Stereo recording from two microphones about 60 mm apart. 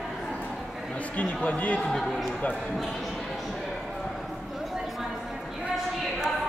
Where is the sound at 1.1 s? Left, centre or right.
Left.